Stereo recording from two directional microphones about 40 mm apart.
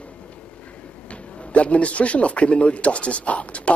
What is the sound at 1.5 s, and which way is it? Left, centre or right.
A man's voice, left.